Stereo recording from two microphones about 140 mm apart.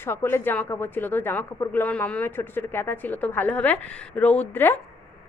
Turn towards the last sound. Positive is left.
turn(degrees=15)  # may be behind; listen again after turning